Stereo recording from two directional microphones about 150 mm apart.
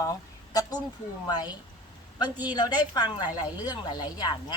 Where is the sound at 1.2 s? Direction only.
30° left (ahead or behind).